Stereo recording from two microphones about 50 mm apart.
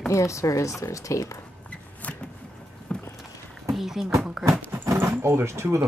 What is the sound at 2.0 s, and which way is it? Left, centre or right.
Vehicle, left.